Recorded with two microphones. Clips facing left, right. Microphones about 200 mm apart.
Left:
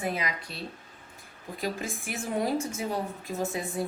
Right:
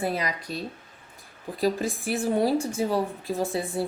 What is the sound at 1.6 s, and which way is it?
A woman's voice, 35° right (ahead or behind).